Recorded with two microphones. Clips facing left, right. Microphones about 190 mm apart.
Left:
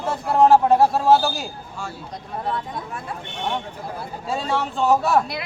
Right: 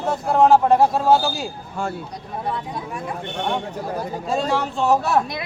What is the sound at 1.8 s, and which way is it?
Speech, 55° right (ahead or behind).